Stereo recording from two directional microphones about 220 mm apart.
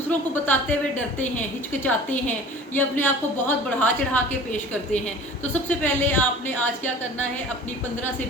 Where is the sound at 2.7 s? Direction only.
10° left (ahead or behind).